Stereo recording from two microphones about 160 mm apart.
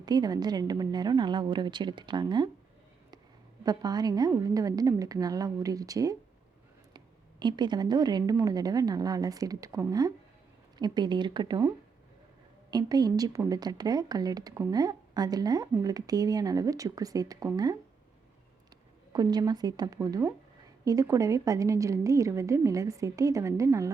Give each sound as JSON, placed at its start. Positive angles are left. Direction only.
{"t": 0.0, "sound": "a woman's voice", "side_deg": -25}
{"t": 3.6, "sound": "a woman's voice", "side_deg": -25}
{"t": 12.7, "sound": "a woman's voice", "side_deg": -25}
{"t": 19.1, "sound": "a woman's voice", "side_deg": -25}